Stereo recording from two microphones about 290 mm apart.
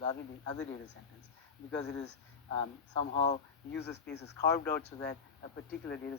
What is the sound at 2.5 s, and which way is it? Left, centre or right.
Speech, centre.